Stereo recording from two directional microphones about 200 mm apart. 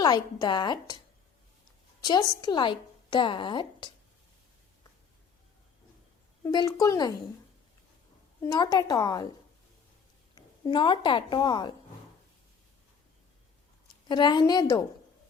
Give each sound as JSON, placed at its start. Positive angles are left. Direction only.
{"t": 0.0, "sound": "speech", "side_deg": 20}
{"t": 2.4, "sound": "speech", "side_deg": 20}
{"t": 6.4, "sound": "speech", "side_deg": 20}
{"t": 8.4, "sound": "speech", "side_deg": 20}
{"t": 10.3, "sound": "a woman's voice", "side_deg": 20}
{"t": 14.1, "sound": "speech", "side_deg": 20}